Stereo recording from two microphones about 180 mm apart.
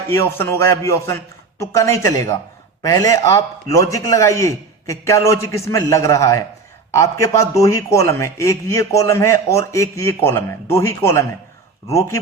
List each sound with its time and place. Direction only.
0.1 s a man's voice: 15° left (ahead or behind)